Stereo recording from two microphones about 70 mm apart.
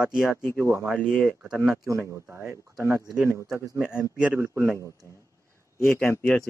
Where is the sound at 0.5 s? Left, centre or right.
Right.